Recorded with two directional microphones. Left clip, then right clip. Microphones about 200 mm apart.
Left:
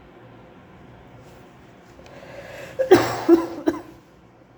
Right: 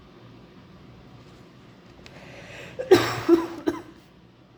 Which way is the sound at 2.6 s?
15° left (ahead or behind).